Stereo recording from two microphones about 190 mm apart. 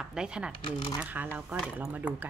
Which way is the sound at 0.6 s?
25° left (ahead or behind).